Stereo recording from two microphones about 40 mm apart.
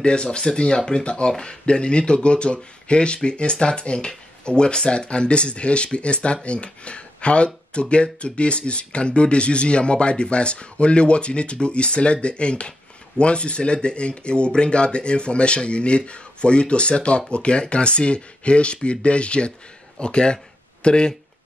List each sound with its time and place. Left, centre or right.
0.0 s speech: left